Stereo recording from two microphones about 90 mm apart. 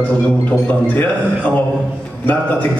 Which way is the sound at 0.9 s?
20° left (ahead or behind).